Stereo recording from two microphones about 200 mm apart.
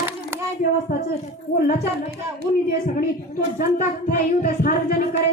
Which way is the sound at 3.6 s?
45° left (ahead or behind).